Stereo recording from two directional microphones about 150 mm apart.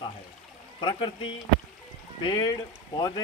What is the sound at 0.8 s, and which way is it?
Speech, 30° left (ahead or behind).